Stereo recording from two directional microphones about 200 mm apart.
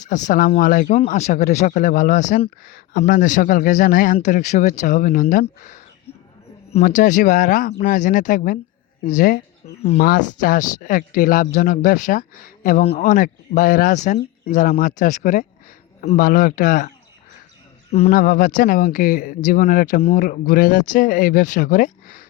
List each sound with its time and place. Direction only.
0.1 s speech: 40° left (ahead or behind)
10.0 s speech: 45° left (ahead or behind)
18.1 s speech: 45° left (ahead or behind)